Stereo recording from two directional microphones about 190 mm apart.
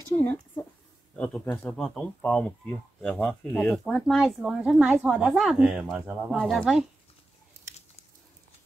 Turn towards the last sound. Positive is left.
turn(degrees=0)  # may be behind; listen again after turning